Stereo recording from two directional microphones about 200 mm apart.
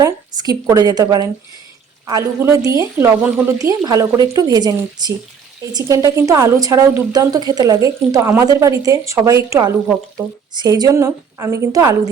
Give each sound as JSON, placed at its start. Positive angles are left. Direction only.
{"t": 0.0, "sound": "a woman's voice", "side_deg": -20}